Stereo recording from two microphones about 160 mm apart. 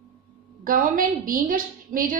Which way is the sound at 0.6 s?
60° right (ahead or behind).